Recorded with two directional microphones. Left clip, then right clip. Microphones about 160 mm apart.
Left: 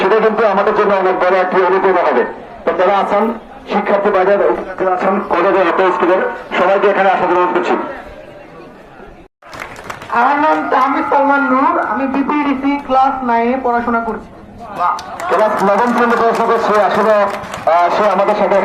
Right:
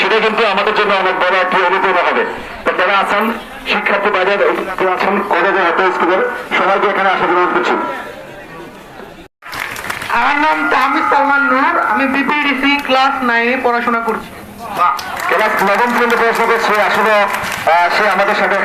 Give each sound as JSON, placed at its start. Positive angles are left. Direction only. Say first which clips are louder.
{"t": 0.0, "sound": "speech", "louder": "left 1 dB", "side_deg": 35}
{"t": 4.1, "sound": "speech", "louder": "left 1 dB", "side_deg": 35}
{"t": 6.1, "sound": "speech", "louder": "even", "side_deg": 40}
{"t": 10.2, "sound": "speech", "louder": "left 1 dB", "side_deg": 20}
{"t": 15.4, "sound": "a man's voice", "louder": "left 1 dB", "side_deg": -20}
{"t": 15.6, "sound": "speech", "louder": "even", "side_deg": -5}